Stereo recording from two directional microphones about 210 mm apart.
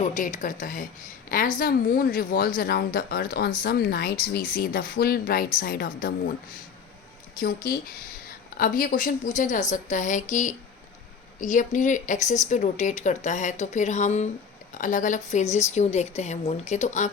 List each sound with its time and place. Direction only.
0.0 s a woman's voice: 35° left (ahead or behind)
7.3 s a woman's voice: 45° left (ahead or behind)